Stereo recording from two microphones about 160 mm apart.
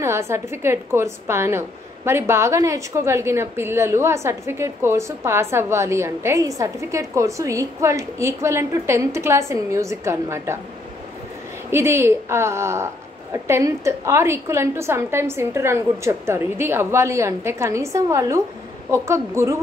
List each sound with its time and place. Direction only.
0.0 s a woman's voice: 15° right (ahead or behind)
11.7 s a woman's voice: 15° right (ahead or behind)